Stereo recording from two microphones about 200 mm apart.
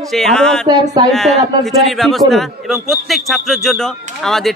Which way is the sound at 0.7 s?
20° right (ahead or behind).